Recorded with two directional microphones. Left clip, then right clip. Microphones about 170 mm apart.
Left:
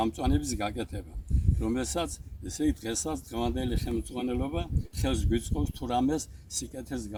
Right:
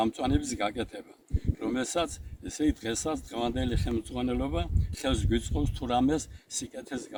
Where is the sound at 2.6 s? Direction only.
5° right (ahead or behind).